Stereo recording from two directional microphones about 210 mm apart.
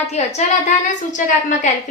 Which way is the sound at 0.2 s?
30° left (ahead or behind).